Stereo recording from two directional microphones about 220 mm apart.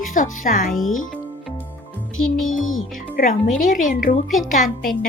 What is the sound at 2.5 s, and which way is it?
Speech, 65° left (ahead or behind).